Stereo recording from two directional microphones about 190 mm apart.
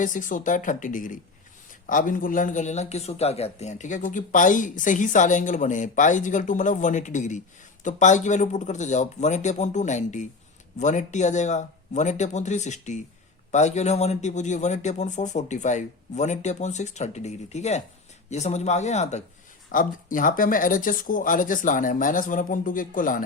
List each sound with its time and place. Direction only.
0.0 s speech: 45° left (ahead or behind)